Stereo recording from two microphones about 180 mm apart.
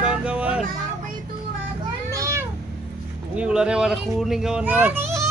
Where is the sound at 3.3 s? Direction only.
5° right (ahead or behind).